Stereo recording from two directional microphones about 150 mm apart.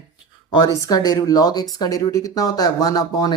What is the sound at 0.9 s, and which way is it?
Speech, 25° left (ahead or behind).